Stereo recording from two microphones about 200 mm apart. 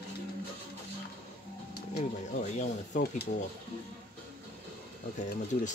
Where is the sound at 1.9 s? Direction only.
40° left (ahead or behind).